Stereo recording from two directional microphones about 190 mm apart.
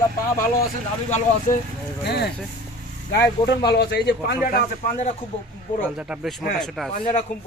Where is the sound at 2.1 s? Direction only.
60° left (ahead or behind).